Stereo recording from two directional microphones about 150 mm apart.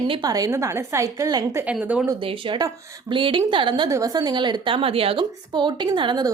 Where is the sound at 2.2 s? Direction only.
35° right (ahead or behind).